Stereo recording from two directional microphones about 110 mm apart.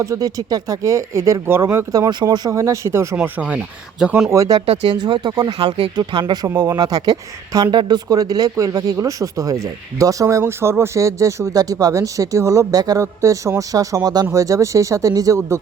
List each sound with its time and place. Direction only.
0.0 s speech: 30° right (ahead or behind)
3.2 s speech: 10° right (ahead or behind)
4.3 s speech: 30° right (ahead or behind)
4.6 s speech: 75° right (ahead or behind)
4.9 s speech: 40° right (ahead or behind)
5.5 s speech: 65° right (ahead or behind)
6.0 s speech: 40° right (ahead or behind)